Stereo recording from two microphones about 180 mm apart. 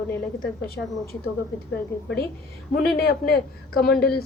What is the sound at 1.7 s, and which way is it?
A woman's voice, 65° left (ahead or behind).